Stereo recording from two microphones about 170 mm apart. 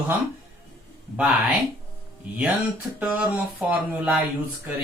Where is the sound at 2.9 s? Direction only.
10° right (ahead or behind).